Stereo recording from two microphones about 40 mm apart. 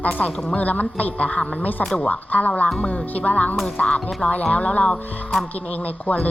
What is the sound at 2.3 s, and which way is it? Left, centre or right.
Music, left.